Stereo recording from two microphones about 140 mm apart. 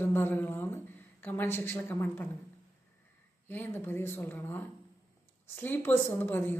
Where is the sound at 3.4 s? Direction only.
15° left (ahead or behind).